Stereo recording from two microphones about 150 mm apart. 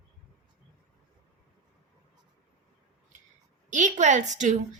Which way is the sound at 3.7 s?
55° right (ahead or behind).